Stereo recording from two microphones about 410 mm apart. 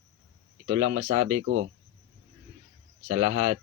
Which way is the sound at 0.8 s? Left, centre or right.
Right.